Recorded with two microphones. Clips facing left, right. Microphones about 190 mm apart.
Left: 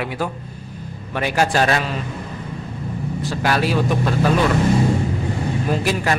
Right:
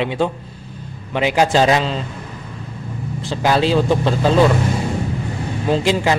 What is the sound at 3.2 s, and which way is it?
A man's voice, 25° right (ahead or behind).